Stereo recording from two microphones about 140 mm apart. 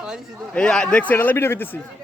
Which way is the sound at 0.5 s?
5° left (ahead or behind).